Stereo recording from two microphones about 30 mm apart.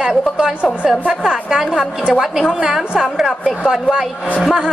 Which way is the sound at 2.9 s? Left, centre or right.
Right.